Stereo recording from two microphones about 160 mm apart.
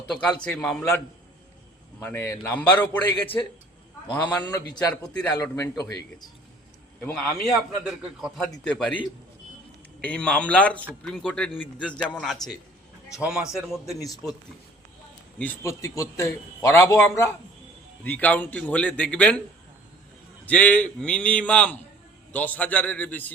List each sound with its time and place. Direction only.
0.1 s a man's voice: 5° left (ahead or behind)
2.0 s a man's voice: 15° left (ahead or behind)
4.2 s a man's voice: 25° left (ahead or behind)
5.0 s a man's voice: 5° left (ahead or behind)
5.3 s a man's voice: 15° left (ahead or behind)
7.0 s a man's voice: 5° left (ahead or behind)
15.4 s a man's voice: 15° left (ahead or behind)
20.4 s a man's voice: 10° left (ahead or behind)